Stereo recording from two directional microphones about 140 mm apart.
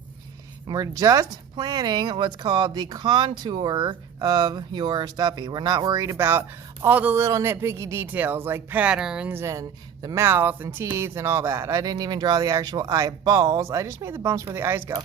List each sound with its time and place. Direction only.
0.7 s a man's voice: 25° right (ahead or behind)